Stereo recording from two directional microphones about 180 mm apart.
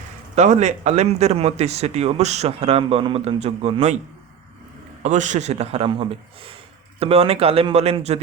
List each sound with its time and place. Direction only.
0.3 s speech: 40° right (ahead or behind)
5.0 s speech: 40° right (ahead or behind)